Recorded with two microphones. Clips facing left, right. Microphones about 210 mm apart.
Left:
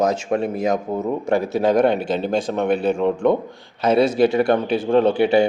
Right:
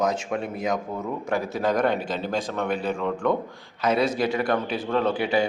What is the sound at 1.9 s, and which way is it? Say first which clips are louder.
Speech: left 6 dB; 70° left (ahead or behind).